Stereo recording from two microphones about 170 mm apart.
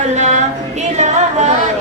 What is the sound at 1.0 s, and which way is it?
Music, 40° right (ahead or behind).